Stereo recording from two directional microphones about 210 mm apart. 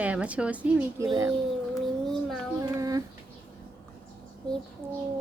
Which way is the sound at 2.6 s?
15° right (ahead or behind).